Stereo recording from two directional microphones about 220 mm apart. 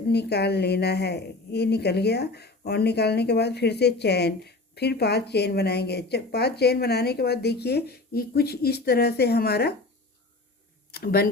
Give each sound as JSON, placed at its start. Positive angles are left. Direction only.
{"t": 0.1, "sound": "a woman's voice", "side_deg": 50}
{"t": 10.9, "sound": "speech", "side_deg": 45}